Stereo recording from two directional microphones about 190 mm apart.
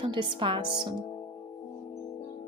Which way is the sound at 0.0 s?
25° right (ahead or behind).